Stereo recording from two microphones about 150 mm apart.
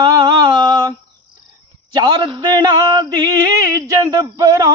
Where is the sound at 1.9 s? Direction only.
30° right (ahead or behind).